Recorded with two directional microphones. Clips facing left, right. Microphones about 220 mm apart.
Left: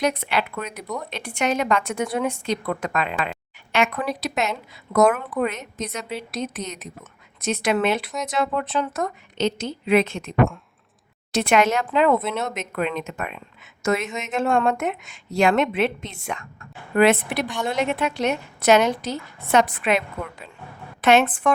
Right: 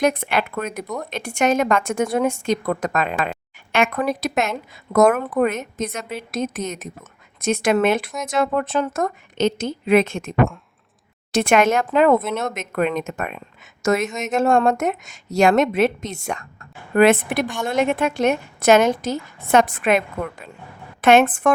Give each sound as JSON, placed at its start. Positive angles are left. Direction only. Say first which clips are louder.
{"t": 0.0, "sound": "a woman's voice", "louder": "right 3 dB", "side_deg": -50}
{"t": 10.3, "sound": "speech", "louder": "right 1 dB", "side_deg": 0}
{"t": 11.3, "sound": "a woman's voice", "louder": "right 3 dB", "side_deg": -50}
{"t": 16.9, "sound": "a woman's voice", "louder": "right 3 dB", "side_deg": -50}